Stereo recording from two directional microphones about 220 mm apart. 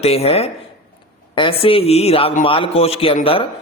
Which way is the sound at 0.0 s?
30° left (ahead or behind).